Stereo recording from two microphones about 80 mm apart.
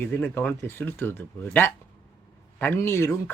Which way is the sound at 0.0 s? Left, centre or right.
Left.